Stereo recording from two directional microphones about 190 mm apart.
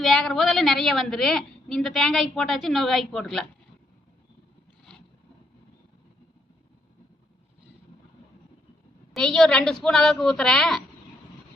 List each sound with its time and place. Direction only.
0.0 s a woman's voice: centre (ahead or behind)
9.1 s a woman's voice: centre (ahead or behind)